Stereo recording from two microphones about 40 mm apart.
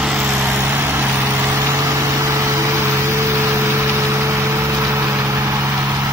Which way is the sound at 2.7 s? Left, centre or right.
Right.